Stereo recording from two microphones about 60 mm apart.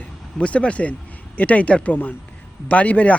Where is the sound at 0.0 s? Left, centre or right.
Left.